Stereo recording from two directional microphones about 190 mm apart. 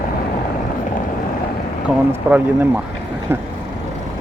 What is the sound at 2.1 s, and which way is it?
Speech, 10° right (ahead or behind).